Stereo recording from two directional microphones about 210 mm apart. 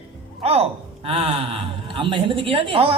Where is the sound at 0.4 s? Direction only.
30° right (ahead or behind).